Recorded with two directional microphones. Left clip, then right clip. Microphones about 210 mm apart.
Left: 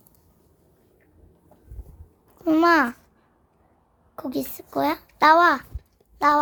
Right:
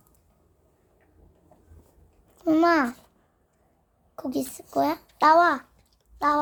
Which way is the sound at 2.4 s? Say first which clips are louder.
Left 3 dB; 15° left (ahead or behind).